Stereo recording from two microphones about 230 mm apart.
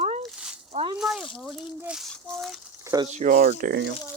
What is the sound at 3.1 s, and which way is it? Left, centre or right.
Speech, right.